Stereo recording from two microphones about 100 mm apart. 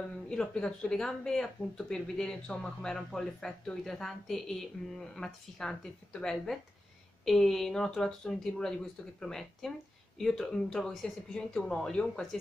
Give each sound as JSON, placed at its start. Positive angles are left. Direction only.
{"t": 0.3, "sound": "speech", "side_deg": 10}